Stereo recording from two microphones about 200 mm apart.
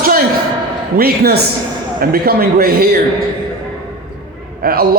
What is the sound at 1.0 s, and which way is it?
A man's voice, 50° right (ahead or behind).